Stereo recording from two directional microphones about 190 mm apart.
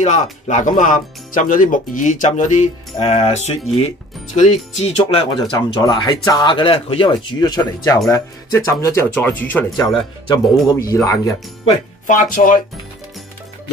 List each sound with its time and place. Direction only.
0.0 s speech: 40° left (ahead or behind); by 9.8 s 10° left (ahead or behind)
9.8 s speech: 20° left (ahead or behind)
12.1 s speech: 45° left (ahead or behind)